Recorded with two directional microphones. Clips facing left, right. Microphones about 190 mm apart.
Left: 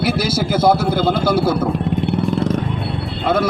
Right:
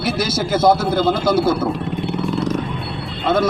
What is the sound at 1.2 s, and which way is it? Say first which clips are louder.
Speech: right 1 dB; 30° left (ahead or behind).